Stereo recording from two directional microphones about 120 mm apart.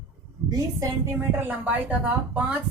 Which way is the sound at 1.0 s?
20° right (ahead or behind).